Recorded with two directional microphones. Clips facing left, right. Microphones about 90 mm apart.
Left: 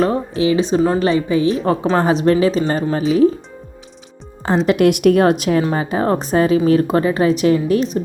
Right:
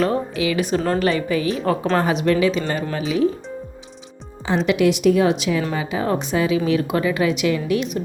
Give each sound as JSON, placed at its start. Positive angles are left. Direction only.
{"t": 0.0, "sound": "a woman's voice", "side_deg": 30}
{"t": 4.4, "sound": "speech", "side_deg": 40}
{"t": 4.9, "sound": "speech", "side_deg": 55}